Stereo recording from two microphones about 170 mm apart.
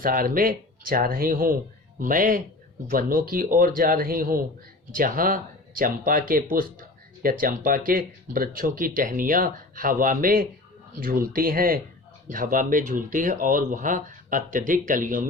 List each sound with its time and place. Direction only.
0.0 s speech: 55° right (ahead or behind)